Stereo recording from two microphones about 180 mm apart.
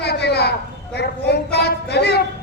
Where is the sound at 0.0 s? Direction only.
65° left (ahead or behind).